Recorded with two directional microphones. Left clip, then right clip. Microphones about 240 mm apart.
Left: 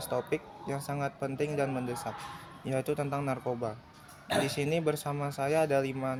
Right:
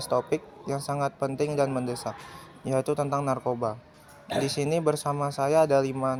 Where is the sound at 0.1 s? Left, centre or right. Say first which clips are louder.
Right 6 dB; centre.